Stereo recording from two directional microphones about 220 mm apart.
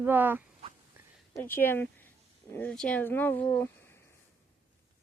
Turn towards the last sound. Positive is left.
turn(degrees=10)  # may be behind; listen again after turning